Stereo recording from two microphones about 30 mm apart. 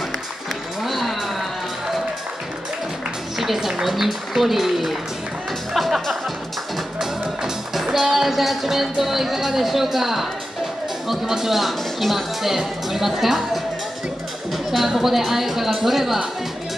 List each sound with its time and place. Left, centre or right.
0.8 s a sound: centre
3.3 s speech: centre
5.7 s music: centre
7.7 s a woman's voice: centre